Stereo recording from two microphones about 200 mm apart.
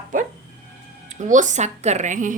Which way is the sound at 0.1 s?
40° right (ahead or behind).